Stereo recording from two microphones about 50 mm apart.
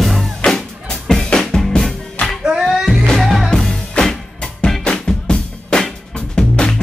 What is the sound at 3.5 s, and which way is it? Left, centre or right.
Music, centre.